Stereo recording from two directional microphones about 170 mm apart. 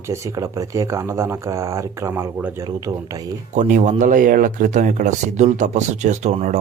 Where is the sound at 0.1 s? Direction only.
15° right (ahead or behind).